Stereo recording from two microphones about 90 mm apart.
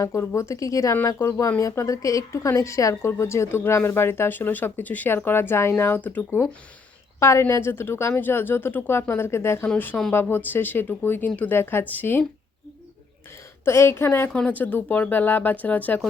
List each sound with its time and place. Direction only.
0.0 s speech: 35° left (ahead or behind)
7.2 s speech: 30° left (ahead or behind)
13.7 s speech: 30° left (ahead or behind)